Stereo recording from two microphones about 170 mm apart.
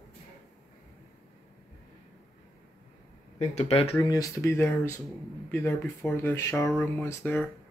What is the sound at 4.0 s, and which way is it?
Speech, 20° left (ahead or behind).